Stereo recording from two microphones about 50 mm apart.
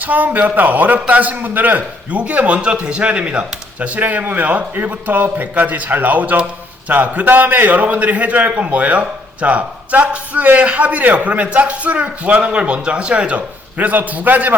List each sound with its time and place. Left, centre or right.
0.0 s a man's voice: right
13.7 s a man's voice: right